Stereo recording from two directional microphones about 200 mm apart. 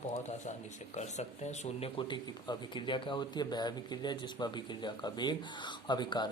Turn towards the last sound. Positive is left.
turn(degrees=20)  # may be behind; listen again after turning